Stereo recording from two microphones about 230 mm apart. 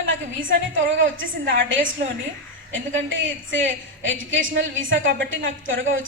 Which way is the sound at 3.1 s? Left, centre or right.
Right.